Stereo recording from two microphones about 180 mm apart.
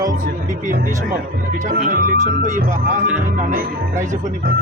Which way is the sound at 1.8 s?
45° right (ahead or behind).